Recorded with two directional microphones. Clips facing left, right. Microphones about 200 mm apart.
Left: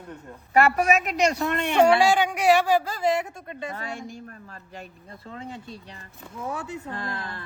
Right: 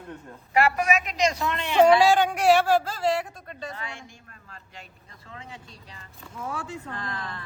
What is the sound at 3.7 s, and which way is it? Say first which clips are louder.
Speech: left 5 dB; 45° left (ahead or behind).